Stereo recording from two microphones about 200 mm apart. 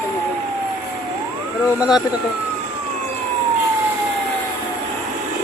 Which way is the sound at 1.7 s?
Centre (ahead or behind).